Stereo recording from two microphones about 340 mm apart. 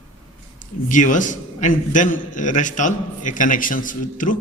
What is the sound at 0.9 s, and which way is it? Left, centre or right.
A man's voice, left.